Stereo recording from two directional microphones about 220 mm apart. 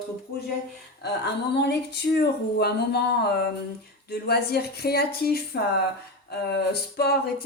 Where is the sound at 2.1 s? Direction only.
45° left (ahead or behind).